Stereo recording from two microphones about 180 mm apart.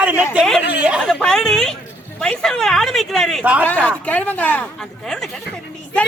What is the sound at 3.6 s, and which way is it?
Speech, 5° left (ahead or behind).